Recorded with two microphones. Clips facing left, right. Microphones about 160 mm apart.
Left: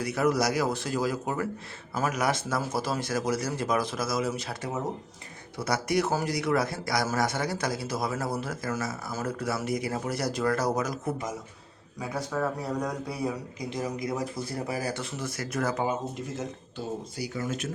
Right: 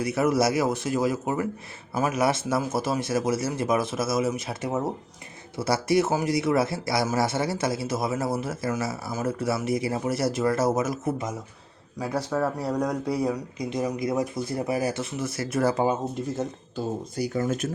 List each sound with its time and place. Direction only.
0.0 s a man's voice: 20° right (ahead or behind)
16.4 s speech: 45° right (ahead or behind)